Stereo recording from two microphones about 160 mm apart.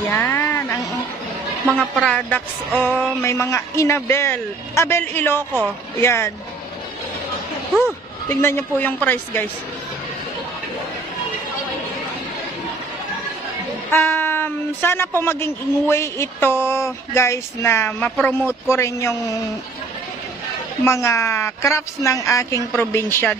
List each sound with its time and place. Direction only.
0.1 s a sound: 15° left (ahead or behind)
1.8 s a woman's voice: 5° left (ahead or behind)
8.3 s a woman's voice: 15° left (ahead or behind)
13.9 s a woman's voice: 10° left (ahead or behind)
20.8 s a woman's voice: 15° left (ahead or behind)